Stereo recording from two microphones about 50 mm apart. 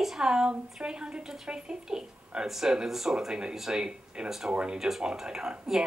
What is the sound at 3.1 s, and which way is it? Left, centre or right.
A woman's voice, centre.